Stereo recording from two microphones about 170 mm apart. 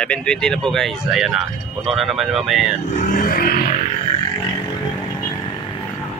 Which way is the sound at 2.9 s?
55° left (ahead or behind).